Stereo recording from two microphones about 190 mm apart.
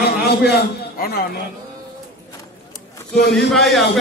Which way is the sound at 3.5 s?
Centre (ahead or behind).